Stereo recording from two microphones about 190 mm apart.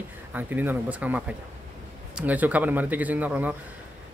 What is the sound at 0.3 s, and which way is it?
A man's voice, 10° right (ahead or behind).